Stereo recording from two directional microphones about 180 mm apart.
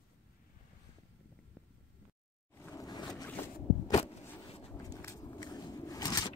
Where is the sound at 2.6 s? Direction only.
20° left (ahead or behind).